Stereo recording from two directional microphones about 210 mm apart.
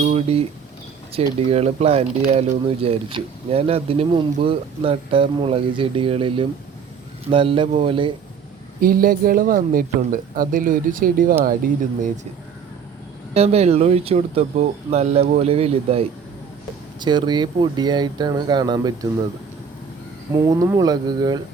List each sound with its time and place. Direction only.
0.0 s speech: 30° right (ahead or behind)
1.5 s speech: 30° right (ahead or behind)
8.8 s speech: 45° right (ahead or behind)
13.3 s speech: 30° right (ahead or behind)
20.3 s speech: 15° right (ahead or behind)